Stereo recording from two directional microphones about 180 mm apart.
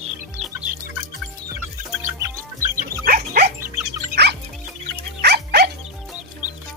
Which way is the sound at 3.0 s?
55° right (ahead or behind).